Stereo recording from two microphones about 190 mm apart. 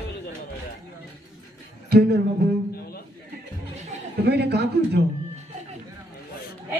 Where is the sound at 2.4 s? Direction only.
60° right (ahead or behind).